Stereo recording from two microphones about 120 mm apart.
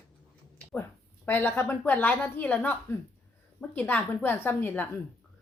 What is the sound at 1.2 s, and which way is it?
A woman's voice, 15° left (ahead or behind).